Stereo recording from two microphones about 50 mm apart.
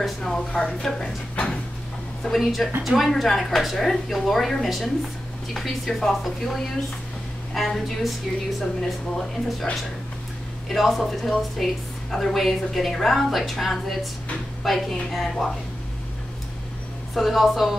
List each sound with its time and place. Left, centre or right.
0.0 s a woman's voice: centre
1.3 s a sound: left
2.4 s a woman's voice: centre
10.7 s a woman's voice: centre
17.1 s a woman's voice: centre